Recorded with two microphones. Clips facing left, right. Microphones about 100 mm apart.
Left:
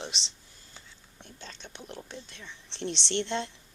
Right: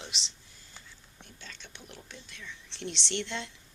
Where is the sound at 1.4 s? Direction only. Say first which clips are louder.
Left 4 dB; 35° left (ahead or behind).